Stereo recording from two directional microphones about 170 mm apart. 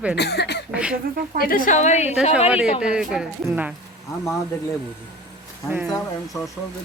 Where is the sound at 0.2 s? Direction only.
80° left.